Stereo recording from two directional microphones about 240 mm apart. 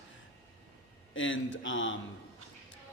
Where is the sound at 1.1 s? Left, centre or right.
Left.